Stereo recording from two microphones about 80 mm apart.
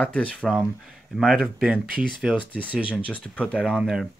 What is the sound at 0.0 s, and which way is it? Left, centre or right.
Speech, centre.